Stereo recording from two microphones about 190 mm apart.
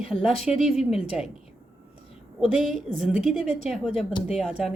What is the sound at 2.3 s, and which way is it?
Speech, centre (ahead or behind).